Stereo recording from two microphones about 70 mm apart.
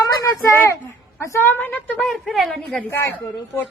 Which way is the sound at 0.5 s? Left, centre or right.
Left.